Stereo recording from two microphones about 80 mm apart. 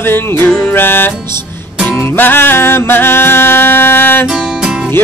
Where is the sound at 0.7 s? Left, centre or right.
Left.